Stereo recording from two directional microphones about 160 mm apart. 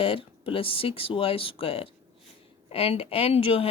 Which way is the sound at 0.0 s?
35° left (ahead or behind).